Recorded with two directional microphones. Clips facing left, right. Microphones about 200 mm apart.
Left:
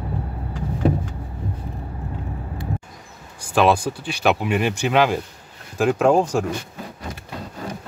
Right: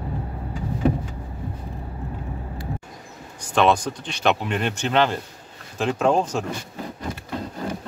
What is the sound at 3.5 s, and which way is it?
Speech, 5° left (ahead or behind).